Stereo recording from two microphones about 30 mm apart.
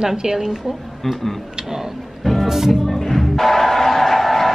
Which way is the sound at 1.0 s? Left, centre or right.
Centre.